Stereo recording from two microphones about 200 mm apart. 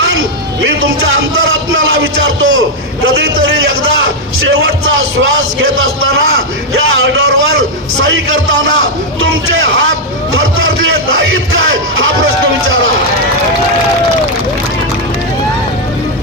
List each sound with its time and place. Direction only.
2.0 s a sound: 90° right
5.7 s a man's voice: 90° right
7.1 s vehicle: 90° right
11.3 s music: 85° right